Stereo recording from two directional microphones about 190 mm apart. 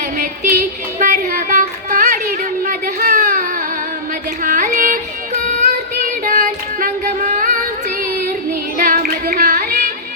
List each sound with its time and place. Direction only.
0.9 s a sound: 40° right (ahead or behind)
4.4 s child singing: 45° right (ahead or behind)
8.8 s child singing: 45° right (ahead or behind)